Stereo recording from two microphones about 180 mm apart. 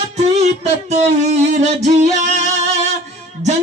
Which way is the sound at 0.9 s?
40° right (ahead or behind).